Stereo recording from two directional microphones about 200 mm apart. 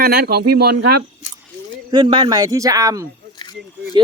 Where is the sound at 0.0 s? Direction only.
50° right (ahead or behind).